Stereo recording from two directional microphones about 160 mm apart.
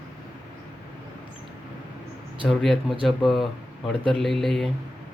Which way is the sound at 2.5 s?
Centre (ahead or behind).